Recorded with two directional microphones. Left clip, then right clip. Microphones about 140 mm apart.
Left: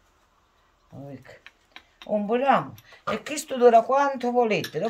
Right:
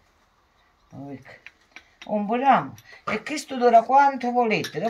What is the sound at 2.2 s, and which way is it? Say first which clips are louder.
Speech: right 2 dB; 50° left (ahead or behind).